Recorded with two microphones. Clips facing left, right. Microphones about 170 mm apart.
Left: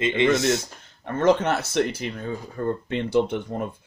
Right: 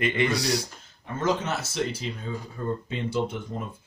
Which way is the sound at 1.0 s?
65° left (ahead or behind).